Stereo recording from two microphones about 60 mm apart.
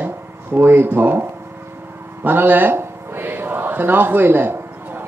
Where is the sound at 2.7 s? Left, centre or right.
Right.